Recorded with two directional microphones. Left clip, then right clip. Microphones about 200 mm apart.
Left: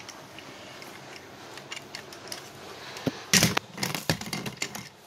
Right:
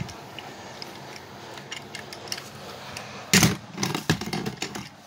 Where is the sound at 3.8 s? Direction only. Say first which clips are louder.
Right 3 dB; 15° left (ahead or behind).